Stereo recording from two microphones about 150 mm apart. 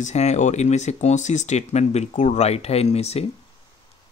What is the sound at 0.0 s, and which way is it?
Speech, 50° left (ahead or behind).